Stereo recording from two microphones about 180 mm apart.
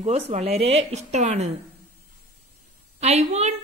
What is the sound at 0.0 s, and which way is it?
Speech, 35° right (ahead or behind).